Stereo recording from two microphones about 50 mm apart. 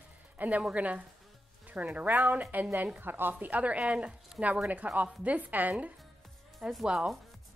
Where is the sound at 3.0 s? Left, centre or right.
Right; by 4.5 s centre.